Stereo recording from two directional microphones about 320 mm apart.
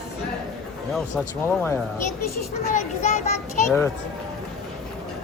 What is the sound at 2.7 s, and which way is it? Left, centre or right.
Speech, left.